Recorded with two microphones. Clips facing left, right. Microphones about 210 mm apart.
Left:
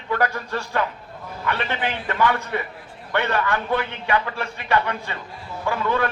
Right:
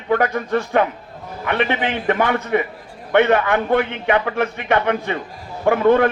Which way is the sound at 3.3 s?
55° right (ahead or behind).